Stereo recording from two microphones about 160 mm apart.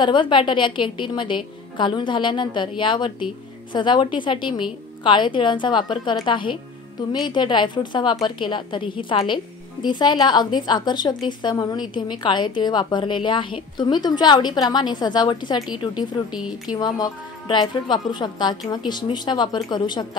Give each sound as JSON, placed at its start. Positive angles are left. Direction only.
{"t": 0.0, "sound": "a woman's voice", "side_deg": 30}
{"t": 16.3, "sound": "speech", "side_deg": -5}
{"t": 16.7, "sound": "a woman's voice", "side_deg": 25}